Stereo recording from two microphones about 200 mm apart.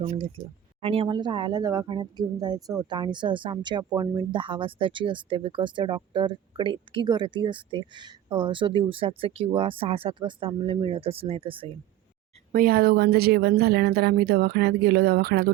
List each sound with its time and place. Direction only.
0.8 s speech: 25° right (ahead or behind)
12.5 s speech: 45° right (ahead or behind)